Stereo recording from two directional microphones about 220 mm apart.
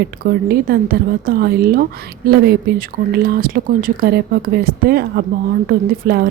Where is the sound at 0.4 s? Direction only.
45° right (ahead or behind).